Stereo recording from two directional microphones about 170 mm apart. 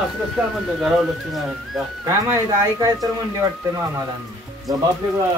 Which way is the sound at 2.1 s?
20° right (ahead or behind).